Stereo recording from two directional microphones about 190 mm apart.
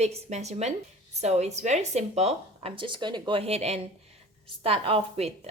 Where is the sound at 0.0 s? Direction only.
35° right (ahead or behind).